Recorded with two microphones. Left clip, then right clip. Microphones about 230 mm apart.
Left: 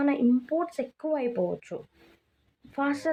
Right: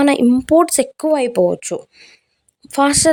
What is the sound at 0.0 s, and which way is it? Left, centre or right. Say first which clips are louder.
Speech: right 12 dB; right.